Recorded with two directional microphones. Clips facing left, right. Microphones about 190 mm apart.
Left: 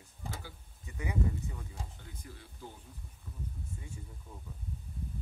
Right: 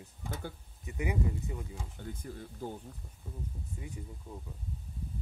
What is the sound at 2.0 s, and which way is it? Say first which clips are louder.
Speech: right 11 dB; 50° right (ahead or behind).